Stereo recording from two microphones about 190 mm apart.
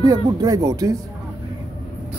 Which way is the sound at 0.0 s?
20° right (ahead or behind).